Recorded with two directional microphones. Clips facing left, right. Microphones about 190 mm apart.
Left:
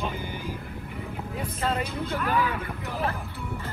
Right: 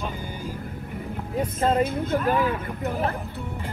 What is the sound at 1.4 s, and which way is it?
Speech, 45° right (ahead or behind).